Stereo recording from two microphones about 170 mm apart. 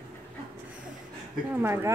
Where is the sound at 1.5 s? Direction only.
15° right (ahead or behind).